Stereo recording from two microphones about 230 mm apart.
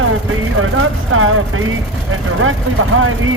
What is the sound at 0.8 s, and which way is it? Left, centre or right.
Speech, right.